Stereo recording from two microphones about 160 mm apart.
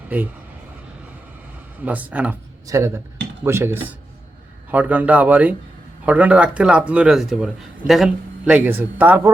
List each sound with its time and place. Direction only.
0.1 s speech: 10° right (ahead or behind)
1.8 s speech: 10° right (ahead or behind)